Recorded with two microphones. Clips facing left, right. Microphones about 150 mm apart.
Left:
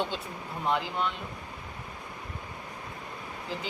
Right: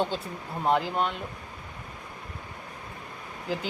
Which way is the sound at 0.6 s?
40° right (ahead or behind).